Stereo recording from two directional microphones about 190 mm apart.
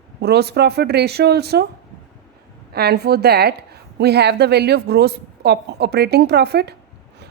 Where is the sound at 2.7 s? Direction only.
60° right (ahead or behind).